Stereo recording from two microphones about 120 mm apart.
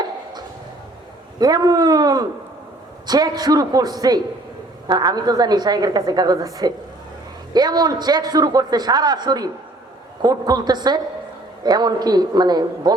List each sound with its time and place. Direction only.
1.4 s a man's voice: 35° right (ahead or behind)